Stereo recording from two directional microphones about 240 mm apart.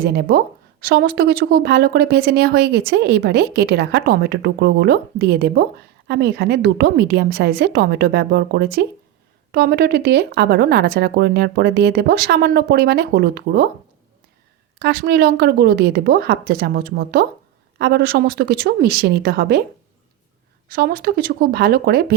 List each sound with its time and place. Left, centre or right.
0.0 s speech: right
14.8 s a woman's voice: right
20.7 s a woman's voice: right